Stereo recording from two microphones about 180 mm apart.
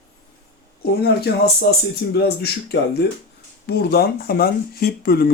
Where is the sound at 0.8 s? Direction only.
60° left (ahead or behind).